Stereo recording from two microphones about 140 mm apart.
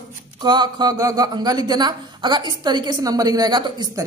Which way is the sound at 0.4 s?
30° right (ahead or behind).